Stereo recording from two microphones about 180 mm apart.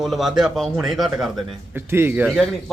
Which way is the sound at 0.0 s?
Centre (ahead or behind).